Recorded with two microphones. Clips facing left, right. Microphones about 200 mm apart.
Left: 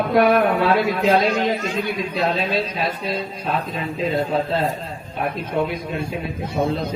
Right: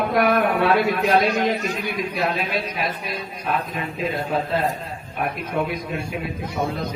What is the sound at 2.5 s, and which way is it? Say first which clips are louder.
Speech: left 3 dB; 30° left (ahead or behind).